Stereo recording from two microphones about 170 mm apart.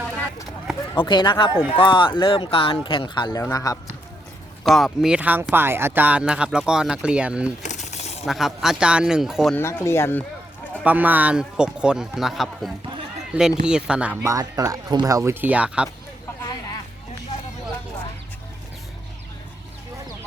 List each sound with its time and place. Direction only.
0.9 s speech: 25° left (ahead or behind)
4.6 s speech: centre (ahead or behind)
7.6 s coin: 45° left (ahead or behind)
8.2 s a man's voice: centre (ahead or behind)
9.6 s speech: 15° left (ahead or behind)
10.8 s a man's voice: 10° right (ahead or behind)